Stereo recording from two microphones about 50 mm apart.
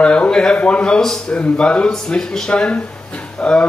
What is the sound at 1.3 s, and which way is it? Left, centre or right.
Speech, left.